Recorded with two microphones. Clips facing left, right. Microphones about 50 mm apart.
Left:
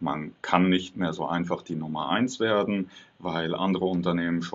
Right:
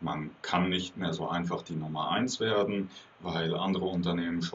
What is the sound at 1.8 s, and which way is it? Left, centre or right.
Speech, left.